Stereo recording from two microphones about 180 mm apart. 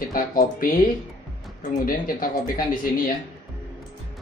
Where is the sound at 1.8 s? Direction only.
50° left (ahead or behind).